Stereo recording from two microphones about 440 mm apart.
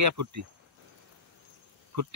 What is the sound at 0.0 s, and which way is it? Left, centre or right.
Speech, right.